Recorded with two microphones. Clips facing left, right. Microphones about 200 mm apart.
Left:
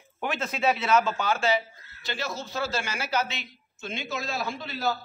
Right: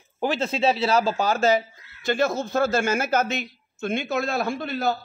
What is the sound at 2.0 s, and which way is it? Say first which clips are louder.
A man's voice: right 11 dB; 50° right (ahead or behind).